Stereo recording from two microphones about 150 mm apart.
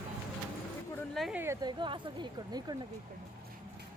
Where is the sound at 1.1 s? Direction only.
Centre (ahead or behind).